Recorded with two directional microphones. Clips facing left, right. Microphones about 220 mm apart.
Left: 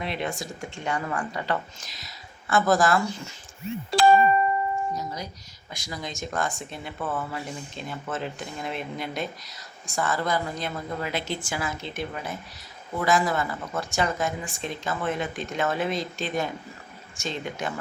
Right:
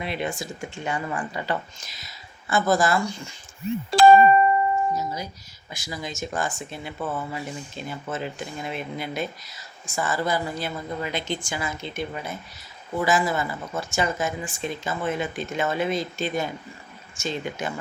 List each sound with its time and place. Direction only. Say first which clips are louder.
0.0 s speech: right 1 dB; 5° right (ahead or behind)
3.9 s speech: right 4 dB; 45° right (ahead or behind)
4.9 s speech: right 3 dB; 5° right (ahead or behind)